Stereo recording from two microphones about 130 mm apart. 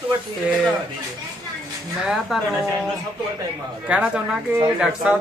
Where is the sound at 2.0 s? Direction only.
Centre (ahead or behind).